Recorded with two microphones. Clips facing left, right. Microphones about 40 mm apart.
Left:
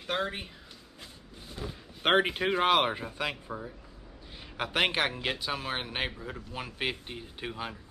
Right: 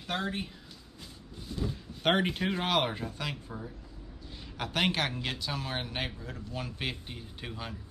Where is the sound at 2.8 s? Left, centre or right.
Centre.